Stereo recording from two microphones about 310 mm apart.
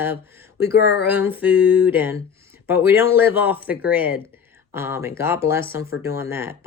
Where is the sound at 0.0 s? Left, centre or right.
Centre.